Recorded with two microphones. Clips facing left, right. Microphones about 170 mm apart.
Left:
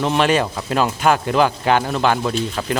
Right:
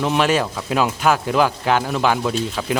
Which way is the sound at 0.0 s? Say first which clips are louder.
Left 1 dB; 5° right (ahead or behind).